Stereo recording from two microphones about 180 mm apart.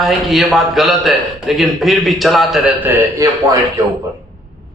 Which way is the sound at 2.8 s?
10° right (ahead or behind).